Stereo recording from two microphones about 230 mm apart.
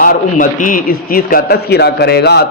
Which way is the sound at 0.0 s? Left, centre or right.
Left.